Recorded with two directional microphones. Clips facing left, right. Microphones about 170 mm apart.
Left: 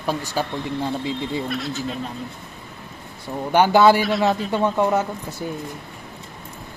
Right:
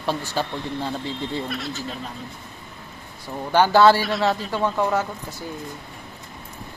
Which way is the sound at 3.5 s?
15° left (ahead or behind).